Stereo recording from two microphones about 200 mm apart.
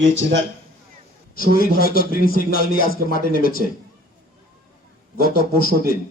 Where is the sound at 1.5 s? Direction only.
45° left (ahead or behind).